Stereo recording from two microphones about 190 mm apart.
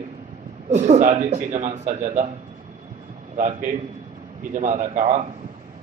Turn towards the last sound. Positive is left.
turn(degrees=-40)  # may be behind; listen again after turning